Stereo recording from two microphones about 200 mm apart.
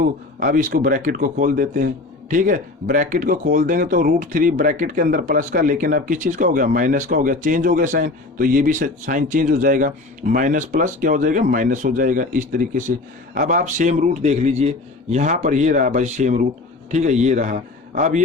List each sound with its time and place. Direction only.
0.3 s speech: 40° right (ahead or behind)